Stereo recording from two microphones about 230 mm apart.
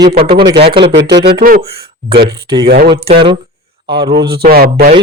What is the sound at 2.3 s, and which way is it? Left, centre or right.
Speech, centre.